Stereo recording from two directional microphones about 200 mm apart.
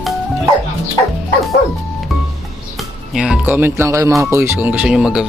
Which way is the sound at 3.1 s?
5° right (ahead or behind).